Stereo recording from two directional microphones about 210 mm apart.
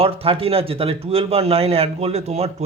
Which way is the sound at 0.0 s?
25° right (ahead or behind).